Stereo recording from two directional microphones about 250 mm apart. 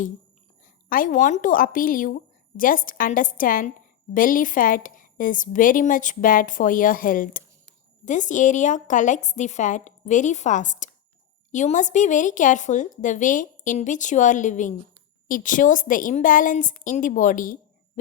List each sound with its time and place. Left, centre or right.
0.9 s a woman's voice: left